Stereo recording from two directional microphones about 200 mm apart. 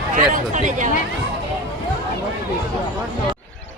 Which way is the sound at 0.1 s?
40° right (ahead or behind).